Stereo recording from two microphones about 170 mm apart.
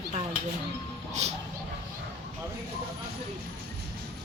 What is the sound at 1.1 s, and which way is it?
Speech, 40° right (ahead or behind).